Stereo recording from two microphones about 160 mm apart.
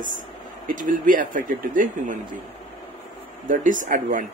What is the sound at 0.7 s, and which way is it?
Speech, 55° right (ahead or behind).